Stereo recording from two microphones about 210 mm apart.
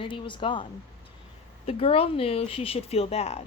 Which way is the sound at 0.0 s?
25° left (ahead or behind).